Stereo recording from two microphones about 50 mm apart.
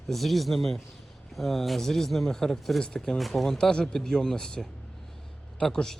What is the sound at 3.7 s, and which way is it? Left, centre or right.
Speech, centre.